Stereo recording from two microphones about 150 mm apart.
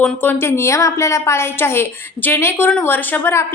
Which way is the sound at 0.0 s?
10° left (ahead or behind).